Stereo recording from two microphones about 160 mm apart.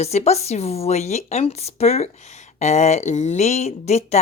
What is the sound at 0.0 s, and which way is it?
Speech, 45° left (ahead or behind).